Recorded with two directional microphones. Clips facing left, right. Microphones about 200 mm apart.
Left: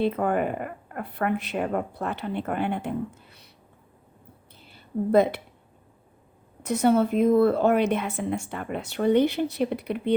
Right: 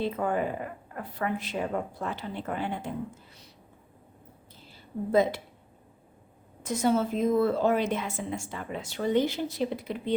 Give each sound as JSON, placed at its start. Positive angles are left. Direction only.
{"t": 0.0, "sound": "a woman's voice", "side_deg": 60}
{"t": 4.6, "sound": "a sound", "side_deg": 60}
{"t": 6.6, "sound": "a woman's voice", "side_deg": 60}